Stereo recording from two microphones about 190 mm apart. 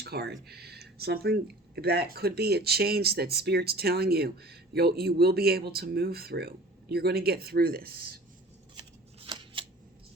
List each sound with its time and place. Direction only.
0.0 s speech: 55° right (ahead or behind)
9.2 s scissors: 25° right (ahead or behind)